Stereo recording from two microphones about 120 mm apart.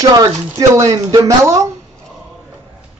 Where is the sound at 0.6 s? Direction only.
25° right (ahead or behind).